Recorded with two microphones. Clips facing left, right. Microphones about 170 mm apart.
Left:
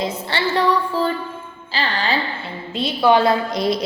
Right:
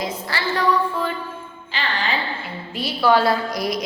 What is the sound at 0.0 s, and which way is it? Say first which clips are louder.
A woman's voice: left 3 dB; 30° left (ahead or behind).